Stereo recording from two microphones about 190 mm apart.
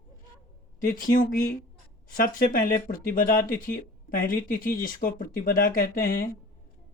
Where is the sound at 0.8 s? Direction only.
45° left (ahead or behind).